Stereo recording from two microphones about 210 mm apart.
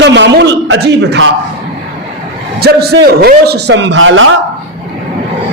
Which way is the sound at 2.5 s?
50° right (ahead or behind).